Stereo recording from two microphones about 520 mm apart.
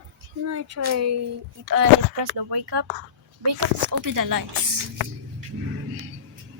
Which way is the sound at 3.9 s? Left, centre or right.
Right.